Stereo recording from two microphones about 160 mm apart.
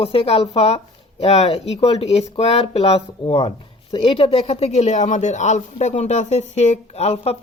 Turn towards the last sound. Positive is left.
turn(degrees=40)  # may be behind; listen again after turning